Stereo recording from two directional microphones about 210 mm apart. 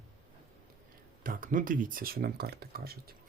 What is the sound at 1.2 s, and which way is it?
Speech, 40° right (ahead or behind).